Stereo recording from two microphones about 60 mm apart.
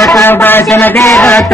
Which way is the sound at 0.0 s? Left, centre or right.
Left.